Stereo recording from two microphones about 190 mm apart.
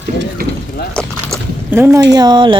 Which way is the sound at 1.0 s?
5° left (ahead or behind).